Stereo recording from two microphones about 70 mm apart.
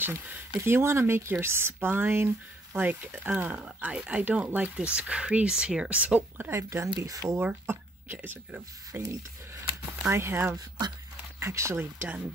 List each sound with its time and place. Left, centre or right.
0.0 s speech: right
6.5 s speech: right
7.1 s speech: right
7.6 s speech: right
8.9 s speech: right
11.7 s speech: right